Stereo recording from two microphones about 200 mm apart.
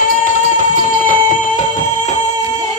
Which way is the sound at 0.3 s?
40° left (ahead or behind).